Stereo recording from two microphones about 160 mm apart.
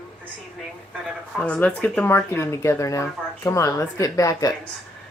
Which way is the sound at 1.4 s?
5° left (ahead or behind).